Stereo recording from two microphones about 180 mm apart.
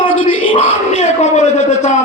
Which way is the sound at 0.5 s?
40° left (ahead or behind).